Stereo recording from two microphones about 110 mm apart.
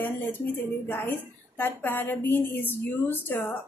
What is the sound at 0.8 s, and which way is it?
A woman's voice, 15° left (ahead or behind).